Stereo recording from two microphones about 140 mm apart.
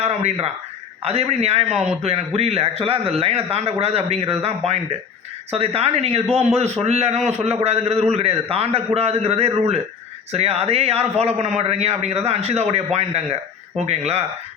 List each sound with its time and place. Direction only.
0.0 s a man's voice: 50° right (ahead or behind)